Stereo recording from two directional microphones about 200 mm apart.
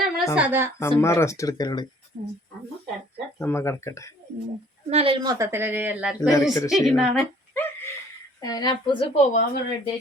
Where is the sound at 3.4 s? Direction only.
10° left (ahead or behind).